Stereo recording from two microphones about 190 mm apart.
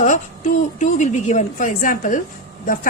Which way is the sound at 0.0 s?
40° left (ahead or behind).